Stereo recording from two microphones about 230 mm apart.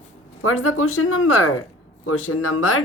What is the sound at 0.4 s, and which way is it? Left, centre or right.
A woman's voice, left.